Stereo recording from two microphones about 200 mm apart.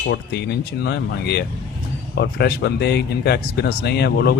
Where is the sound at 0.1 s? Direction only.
55° left (ahead or behind).